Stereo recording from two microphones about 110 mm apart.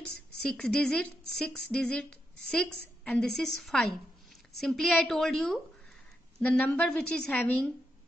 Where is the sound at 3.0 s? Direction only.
5° left (ahead or behind).